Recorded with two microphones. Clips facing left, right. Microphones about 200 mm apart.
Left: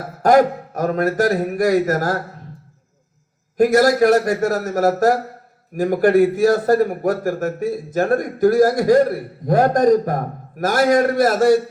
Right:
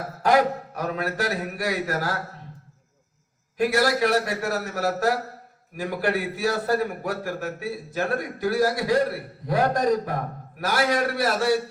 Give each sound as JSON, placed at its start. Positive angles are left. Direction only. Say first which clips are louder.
{"t": 0.2, "sound": "a man's voice", "louder": "left 7 dB", "side_deg": 45}
{"t": 3.6, "sound": "a man's voice", "louder": "left 8 dB", "side_deg": 45}